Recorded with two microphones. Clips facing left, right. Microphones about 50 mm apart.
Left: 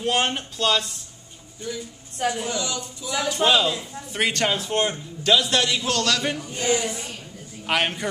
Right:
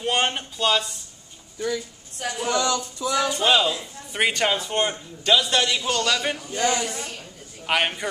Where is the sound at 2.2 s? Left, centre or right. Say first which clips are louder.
Left 5 dB; left.